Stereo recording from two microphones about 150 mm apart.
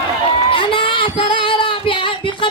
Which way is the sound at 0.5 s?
35° left (ahead or behind).